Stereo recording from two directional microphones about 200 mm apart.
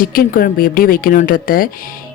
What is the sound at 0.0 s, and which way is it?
A woman's voice, 45° left (ahead or behind).